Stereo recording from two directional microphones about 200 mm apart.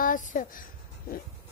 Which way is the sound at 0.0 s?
40° left (ahead or behind).